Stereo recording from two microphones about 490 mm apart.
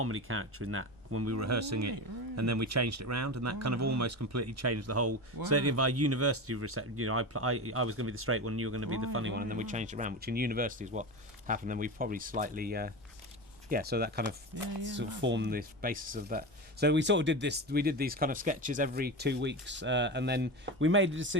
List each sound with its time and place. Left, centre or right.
0.0 s speech: right